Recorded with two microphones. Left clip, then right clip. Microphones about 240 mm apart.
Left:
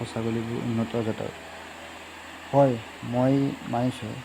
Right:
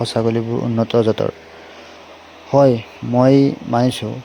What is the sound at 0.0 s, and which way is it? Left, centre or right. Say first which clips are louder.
Speech: right 12 dB; right.